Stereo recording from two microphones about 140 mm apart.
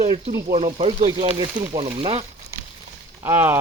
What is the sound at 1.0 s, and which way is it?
Speech, 35° right (ahead or behind).